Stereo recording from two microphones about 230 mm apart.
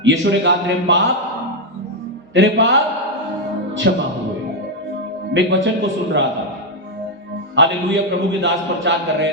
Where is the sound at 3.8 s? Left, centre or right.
Right.